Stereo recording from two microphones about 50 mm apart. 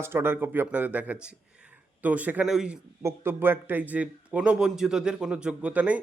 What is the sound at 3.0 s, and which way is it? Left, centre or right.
A man's voice, right.